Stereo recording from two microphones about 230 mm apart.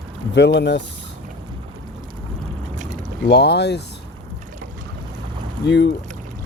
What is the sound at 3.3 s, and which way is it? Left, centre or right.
Speech, left.